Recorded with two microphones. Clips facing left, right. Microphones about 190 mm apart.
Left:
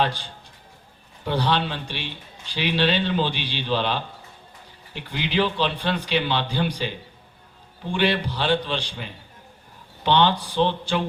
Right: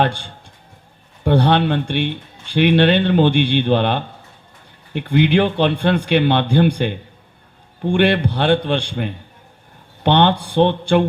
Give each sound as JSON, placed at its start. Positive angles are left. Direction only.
{"t": 0.0, "sound": "speech", "side_deg": -55}